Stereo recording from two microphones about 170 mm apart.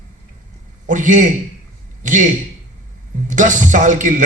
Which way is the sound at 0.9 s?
50° right (ahead or behind).